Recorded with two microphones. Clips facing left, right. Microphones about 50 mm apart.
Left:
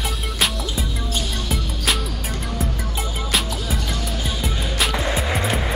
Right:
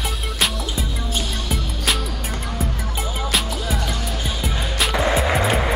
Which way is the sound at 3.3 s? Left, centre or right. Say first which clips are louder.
Even; centre.